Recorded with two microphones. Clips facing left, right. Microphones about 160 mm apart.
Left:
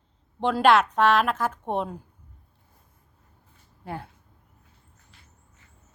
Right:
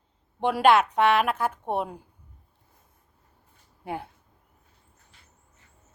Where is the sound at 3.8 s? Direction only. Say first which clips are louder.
Right 2 dB; 15° right (ahead or behind).